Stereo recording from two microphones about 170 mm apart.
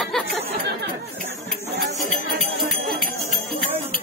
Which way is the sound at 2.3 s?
Centre (ahead or behind).